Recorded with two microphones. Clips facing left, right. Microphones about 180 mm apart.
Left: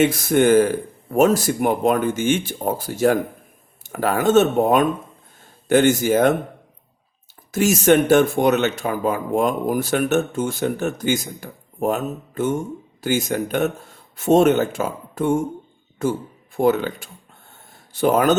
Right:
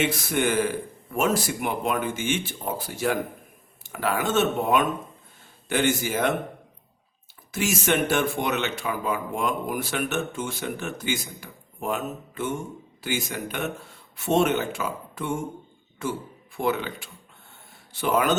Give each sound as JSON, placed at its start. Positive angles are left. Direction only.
{"t": 0.0, "sound": "speech", "side_deg": 45}
{"t": 7.5, "sound": "speech", "side_deg": 45}